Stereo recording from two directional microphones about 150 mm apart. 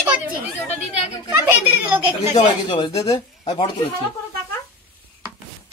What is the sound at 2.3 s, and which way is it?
Speech, 35° left (ahead or behind).